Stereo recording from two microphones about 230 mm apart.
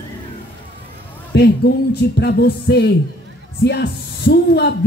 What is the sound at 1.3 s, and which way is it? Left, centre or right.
Speech, left.